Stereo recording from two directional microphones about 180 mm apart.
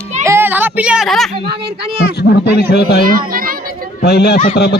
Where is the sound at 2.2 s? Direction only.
65° left (ahead or behind).